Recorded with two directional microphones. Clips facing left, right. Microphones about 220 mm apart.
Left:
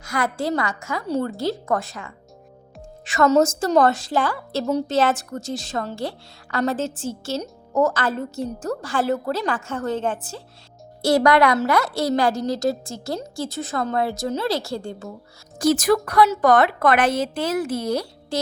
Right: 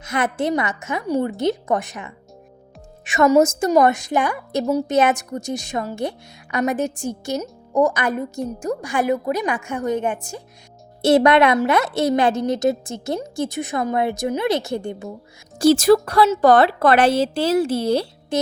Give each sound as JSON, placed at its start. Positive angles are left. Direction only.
{"t": 0.0, "sound": "a woman's voice", "side_deg": -20}
{"t": 15.5, "sound": "a woman's voice", "side_deg": -30}